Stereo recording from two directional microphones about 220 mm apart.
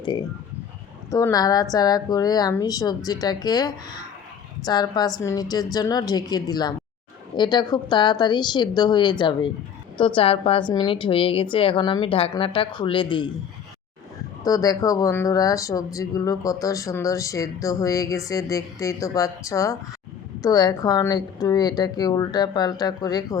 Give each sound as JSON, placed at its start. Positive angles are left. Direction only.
{"t": 0.0, "sound": "a woman's voice", "side_deg": 20}
{"t": 14.4, "sound": "speech", "side_deg": 15}